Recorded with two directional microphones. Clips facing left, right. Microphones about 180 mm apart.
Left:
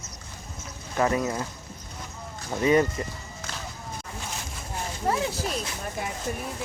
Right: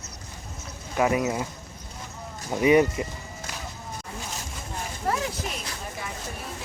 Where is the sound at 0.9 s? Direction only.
10° right (ahead or behind).